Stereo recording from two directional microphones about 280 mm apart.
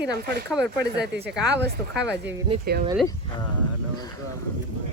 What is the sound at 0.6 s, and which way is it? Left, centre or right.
Speech, right.